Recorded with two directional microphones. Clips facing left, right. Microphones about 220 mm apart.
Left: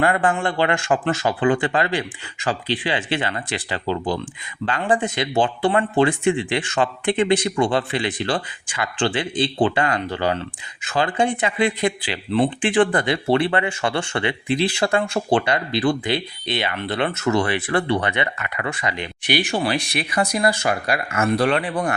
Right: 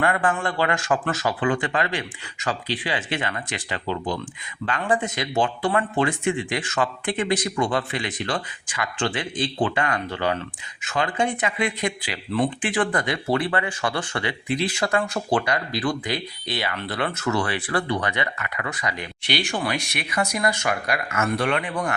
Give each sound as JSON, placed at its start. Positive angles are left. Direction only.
{"t": 0.0, "sound": "speech", "side_deg": 30}